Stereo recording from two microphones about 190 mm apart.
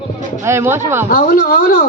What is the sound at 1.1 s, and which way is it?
Speech, 45° left (ahead or behind).